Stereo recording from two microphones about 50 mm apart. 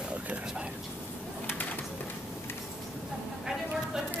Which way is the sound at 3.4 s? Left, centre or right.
Centre.